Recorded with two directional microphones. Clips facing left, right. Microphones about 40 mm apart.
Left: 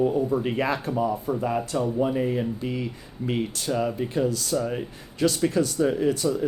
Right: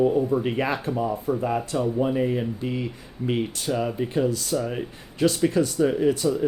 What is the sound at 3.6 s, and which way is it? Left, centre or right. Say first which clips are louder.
Speech: even; right.